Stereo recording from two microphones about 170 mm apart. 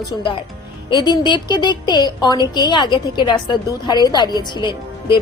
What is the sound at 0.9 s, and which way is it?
A woman's voice, 25° left (ahead or behind).